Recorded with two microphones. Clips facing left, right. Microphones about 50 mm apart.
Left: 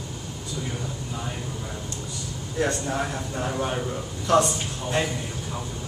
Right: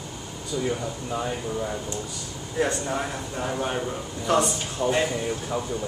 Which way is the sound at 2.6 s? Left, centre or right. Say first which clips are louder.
Even; centre.